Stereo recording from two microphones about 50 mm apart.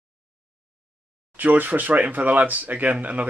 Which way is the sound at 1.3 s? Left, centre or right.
Right.